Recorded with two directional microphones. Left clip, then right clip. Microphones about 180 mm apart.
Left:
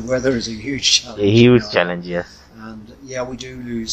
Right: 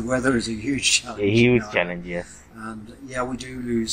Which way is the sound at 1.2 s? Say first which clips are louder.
Left 6 dB; 35° left (ahead or behind).